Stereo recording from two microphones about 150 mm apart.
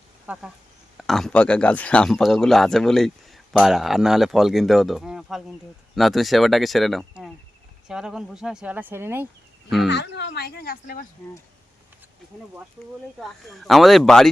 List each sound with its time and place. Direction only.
0.3 s speech: 10° right (ahead or behind)
9.6 s speech: centre (ahead or behind)
10.2 s speech: 90° left
13.1 s speech: centre (ahead or behind)